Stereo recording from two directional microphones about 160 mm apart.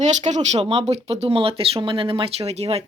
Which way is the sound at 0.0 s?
50° right (ahead or behind).